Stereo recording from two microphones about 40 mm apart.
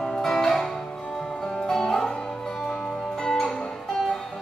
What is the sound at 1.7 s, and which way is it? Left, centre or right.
Music, centre.